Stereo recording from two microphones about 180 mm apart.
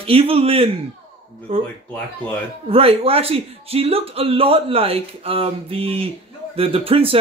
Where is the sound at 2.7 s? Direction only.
30° right (ahead or behind).